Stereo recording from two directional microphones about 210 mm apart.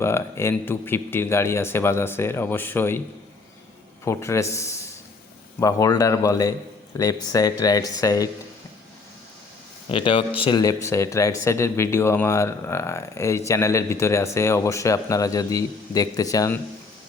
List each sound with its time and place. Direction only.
0.0 s speech: 10° left (ahead or behind)
4.0 s speech: 15° left (ahead or behind)
9.9 s speech: 25° left (ahead or behind)